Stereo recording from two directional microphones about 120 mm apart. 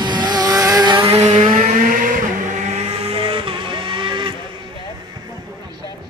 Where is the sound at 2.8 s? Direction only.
50° right (ahead or behind).